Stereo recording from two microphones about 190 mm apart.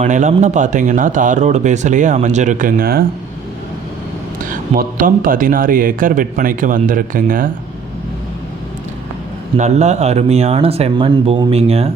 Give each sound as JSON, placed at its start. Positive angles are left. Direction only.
{"t": 0.0, "sound": "a man's voice", "side_deg": -40}
{"t": 4.4, "sound": "speech", "side_deg": -45}
{"t": 9.6, "sound": "a man's voice", "side_deg": -35}